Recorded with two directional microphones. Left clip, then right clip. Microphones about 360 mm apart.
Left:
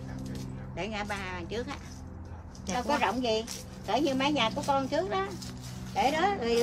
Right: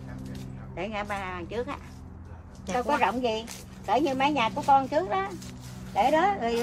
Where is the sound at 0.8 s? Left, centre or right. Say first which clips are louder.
Right 3 dB; centre.